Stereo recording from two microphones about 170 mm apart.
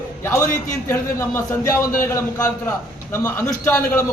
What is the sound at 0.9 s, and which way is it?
A man's voice, 15° left (ahead or behind).